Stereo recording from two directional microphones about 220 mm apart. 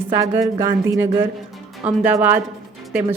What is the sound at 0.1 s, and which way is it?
A woman's voice, 15° right (ahead or behind).